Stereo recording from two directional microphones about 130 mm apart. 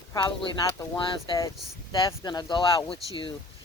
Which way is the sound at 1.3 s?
35° left (ahead or behind).